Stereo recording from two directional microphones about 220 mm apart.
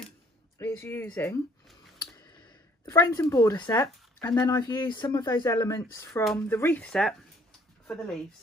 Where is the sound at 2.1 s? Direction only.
20° left (ahead or behind).